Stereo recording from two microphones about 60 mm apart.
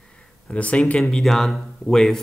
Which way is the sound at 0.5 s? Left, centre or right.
Left.